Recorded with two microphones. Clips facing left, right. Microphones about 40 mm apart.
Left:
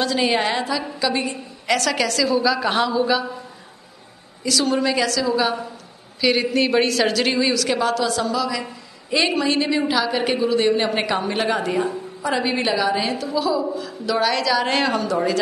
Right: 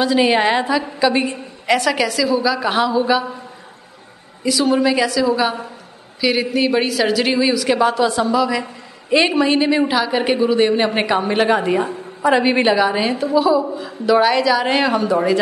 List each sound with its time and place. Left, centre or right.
0.0 s a woman's voice: centre
2.9 s a woman's voice: centre
4.5 s a woman's voice: centre
6.2 s a woman's voice: centre; by 12.7 s right
12.7 s a woman's voice: centre
15.0 s a woman's voice: right